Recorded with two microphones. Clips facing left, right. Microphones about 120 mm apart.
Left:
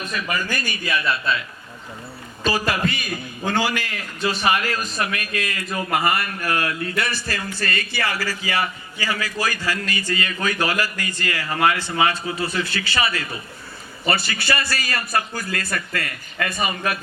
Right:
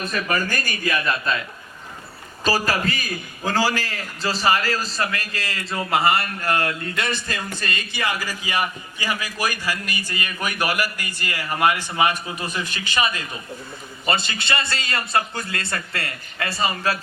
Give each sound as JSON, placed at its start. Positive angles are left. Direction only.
{"t": 0.1, "sound": "speech", "side_deg": -45}
{"t": 2.4, "sound": "a man's voice", "side_deg": -35}